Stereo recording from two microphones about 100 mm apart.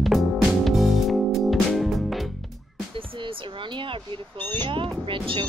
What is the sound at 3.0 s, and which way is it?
Speech, 65° right (ahead or behind).